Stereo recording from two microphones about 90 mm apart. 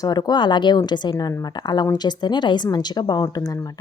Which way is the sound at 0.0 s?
50° left (ahead or behind).